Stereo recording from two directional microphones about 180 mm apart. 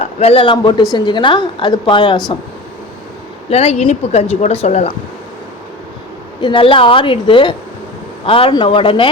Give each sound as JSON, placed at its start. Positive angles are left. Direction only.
{"t": 0.0, "sound": "a woman's voice", "side_deg": 35}
{"t": 3.5, "sound": "a woman's voice", "side_deg": 35}
{"t": 6.4, "sound": "a woman's voice", "side_deg": 30}